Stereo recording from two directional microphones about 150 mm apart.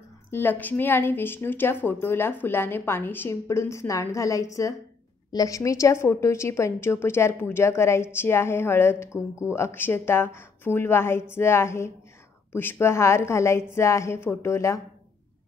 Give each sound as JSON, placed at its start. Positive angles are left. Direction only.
{"t": 0.3, "sound": "a woman's voice", "side_deg": 15}